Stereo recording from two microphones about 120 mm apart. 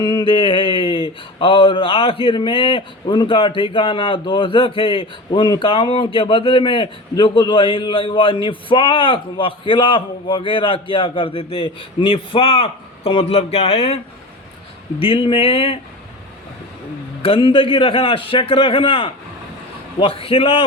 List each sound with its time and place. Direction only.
0.0 s mantra: 35° left (ahead or behind)
1.4 s a man's voice: 45° left (ahead or behind)
17.2 s a man's voice: 50° left (ahead or behind)